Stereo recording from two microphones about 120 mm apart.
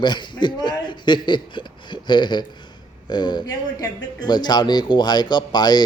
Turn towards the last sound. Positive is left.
turn(degrees=35)  # may be behind; listen again after turning